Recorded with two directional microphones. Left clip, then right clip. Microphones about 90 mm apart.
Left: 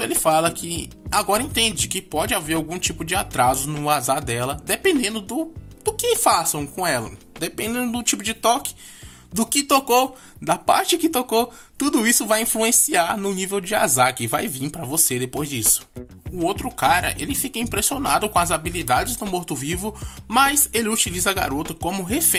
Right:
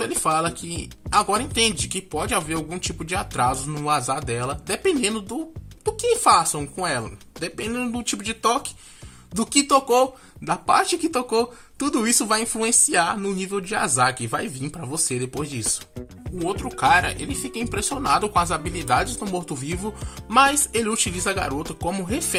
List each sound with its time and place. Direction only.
0.0 s speech: 45° left (ahead or behind)
3.8 s speech: 50° left (ahead or behind)
4.8 s speech: 35° left (ahead or behind)
6.8 s speech: 45° left (ahead or behind)
7.3 s speech: 60° left (ahead or behind)
7.9 s speech: 35° left (ahead or behind)
9.5 s speech: 50° left (ahead or behind)
16.4 s speech: 35° left (ahead or behind)